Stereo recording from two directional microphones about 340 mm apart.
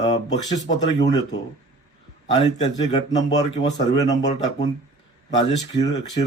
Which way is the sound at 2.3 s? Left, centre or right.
Centre.